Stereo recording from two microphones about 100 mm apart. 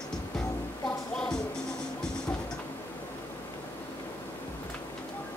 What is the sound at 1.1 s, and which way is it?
Music, 10° left (ahead or behind).